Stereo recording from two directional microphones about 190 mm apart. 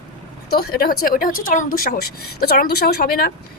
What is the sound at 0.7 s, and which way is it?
Speech, 50° left (ahead or behind).